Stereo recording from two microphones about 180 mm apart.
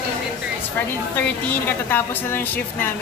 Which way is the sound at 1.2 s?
10° left (ahead or behind).